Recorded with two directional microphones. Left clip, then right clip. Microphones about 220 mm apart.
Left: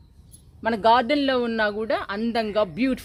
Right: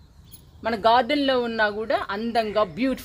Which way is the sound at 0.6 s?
50° left (ahead or behind).